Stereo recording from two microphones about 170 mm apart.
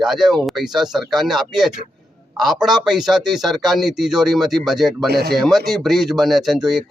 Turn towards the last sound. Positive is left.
turn(degrees=0)  # may be behind; listen again after turning